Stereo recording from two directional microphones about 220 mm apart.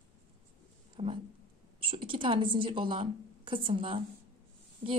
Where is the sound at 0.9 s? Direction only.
25° right (ahead or behind).